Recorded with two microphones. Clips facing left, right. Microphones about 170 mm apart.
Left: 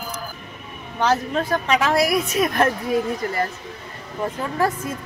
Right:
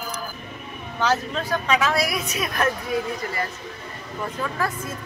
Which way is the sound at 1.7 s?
50° left (ahead or behind).